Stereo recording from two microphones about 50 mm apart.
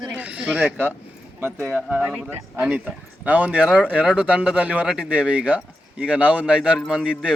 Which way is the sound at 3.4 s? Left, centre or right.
Centre.